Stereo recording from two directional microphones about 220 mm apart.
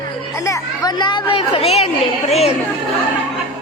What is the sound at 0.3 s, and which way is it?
A woman's voice, 15° left (ahead or behind).